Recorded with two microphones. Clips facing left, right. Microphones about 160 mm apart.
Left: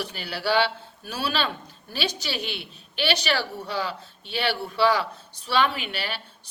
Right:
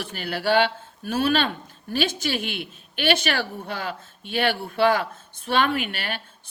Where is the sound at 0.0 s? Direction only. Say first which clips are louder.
Right 3 dB; 50° right (ahead or behind).